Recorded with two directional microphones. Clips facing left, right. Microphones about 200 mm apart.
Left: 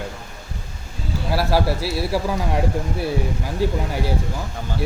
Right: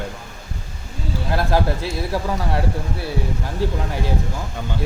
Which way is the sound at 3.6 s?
10° left (ahead or behind).